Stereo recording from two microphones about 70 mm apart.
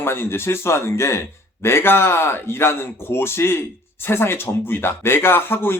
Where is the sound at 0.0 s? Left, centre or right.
Left.